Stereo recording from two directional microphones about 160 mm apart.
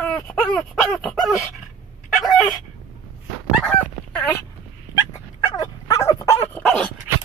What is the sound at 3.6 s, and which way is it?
Goose, 10° left (ahead or behind).